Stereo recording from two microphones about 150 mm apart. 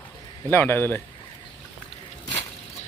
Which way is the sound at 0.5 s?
15° left (ahead or behind).